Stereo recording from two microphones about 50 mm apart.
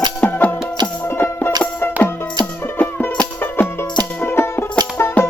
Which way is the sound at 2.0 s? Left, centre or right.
Left.